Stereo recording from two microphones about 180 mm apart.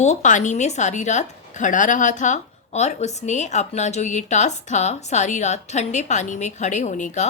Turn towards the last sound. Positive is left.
turn(degrees=40)  # may be behind; listen again after turning